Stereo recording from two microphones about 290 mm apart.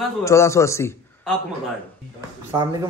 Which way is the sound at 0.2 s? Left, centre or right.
Centre.